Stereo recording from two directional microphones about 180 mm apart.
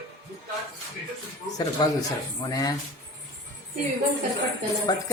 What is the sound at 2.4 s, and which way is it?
Speech, 20° left (ahead or behind).